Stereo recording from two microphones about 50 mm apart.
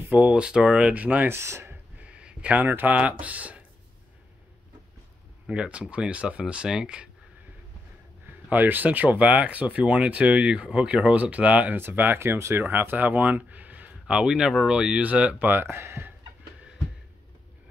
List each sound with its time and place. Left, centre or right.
0.3 s speech: centre
0.9 s speech: right
1.3 s speech: right
2.0 s speech: right
5.5 s speech: right
8.3 s speech: right
12.2 s speech: right
12.6 s speech: right
14.0 s speech: centre
15.3 s speech: right
15.6 s speech: right